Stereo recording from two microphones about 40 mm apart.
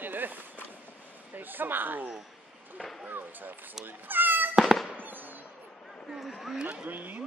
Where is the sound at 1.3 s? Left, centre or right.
Right.